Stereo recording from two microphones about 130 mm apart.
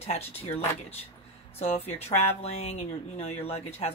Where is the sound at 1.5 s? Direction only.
55° left (ahead or behind).